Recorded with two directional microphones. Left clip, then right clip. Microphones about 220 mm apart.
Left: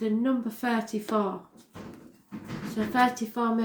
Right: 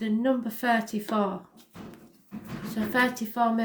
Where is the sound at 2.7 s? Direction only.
40° right (ahead or behind).